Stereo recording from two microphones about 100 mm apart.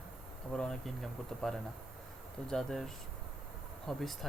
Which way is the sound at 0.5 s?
5° left (ahead or behind).